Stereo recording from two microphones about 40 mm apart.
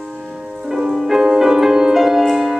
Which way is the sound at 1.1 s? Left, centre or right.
Centre.